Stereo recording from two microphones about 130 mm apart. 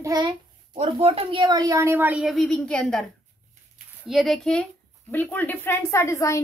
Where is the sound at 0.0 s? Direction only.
30° right (ahead or behind).